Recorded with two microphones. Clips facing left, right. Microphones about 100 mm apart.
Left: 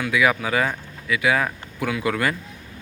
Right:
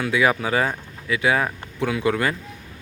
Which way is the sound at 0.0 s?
30° right (ahead or behind).